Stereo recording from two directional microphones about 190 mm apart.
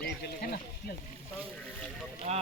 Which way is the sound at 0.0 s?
50° left (ahead or behind).